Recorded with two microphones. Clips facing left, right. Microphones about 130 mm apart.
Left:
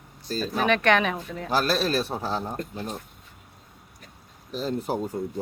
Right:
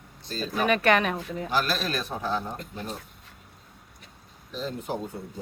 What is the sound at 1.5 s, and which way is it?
A man's voice, 35° left (ahead or behind).